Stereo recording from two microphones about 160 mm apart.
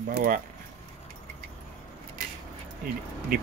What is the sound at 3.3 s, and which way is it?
Speech, 60° right (ahead or behind).